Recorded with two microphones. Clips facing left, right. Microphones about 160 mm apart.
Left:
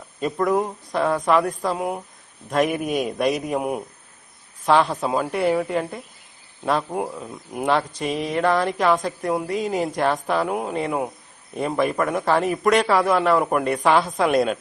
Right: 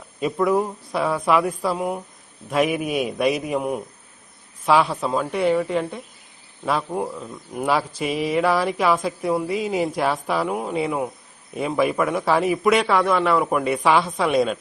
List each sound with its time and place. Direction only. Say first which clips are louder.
0.2 s speech: right 1 dB; 5° right (ahead or behind)
7.7 s speech: even; 5° right (ahead or behind)